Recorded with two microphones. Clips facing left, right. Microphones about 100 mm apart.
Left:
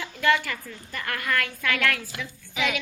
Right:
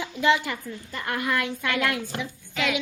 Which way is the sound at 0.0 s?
20° right (ahead or behind).